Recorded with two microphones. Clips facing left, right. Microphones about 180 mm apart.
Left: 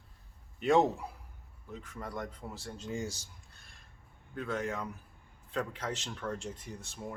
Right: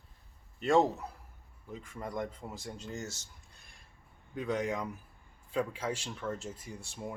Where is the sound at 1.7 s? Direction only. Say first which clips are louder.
Right 2 dB; 10° right (ahead or behind).